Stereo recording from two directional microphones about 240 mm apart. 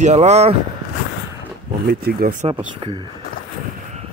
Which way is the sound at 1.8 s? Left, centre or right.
Right.